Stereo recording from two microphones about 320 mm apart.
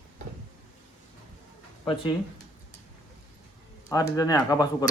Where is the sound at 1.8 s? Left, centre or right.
Centre.